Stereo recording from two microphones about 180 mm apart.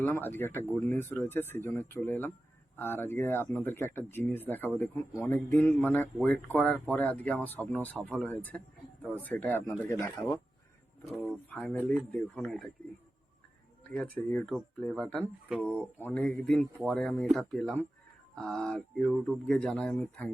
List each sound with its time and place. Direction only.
0.0 s speech: 10° left (ahead or behind)
11.0 s speech: centre (ahead or behind)
13.9 s speech: 5° left (ahead or behind)
15.4 s speech: 5° right (ahead or behind)
16.1 s speech: 5° left (ahead or behind)